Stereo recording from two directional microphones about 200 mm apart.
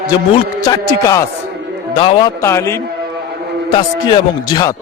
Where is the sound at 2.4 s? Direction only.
15° left (ahead or behind).